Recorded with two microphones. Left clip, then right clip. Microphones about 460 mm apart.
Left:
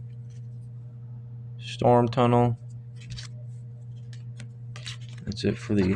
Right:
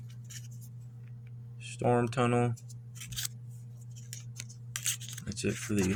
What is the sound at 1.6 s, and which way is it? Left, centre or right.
Speech, right.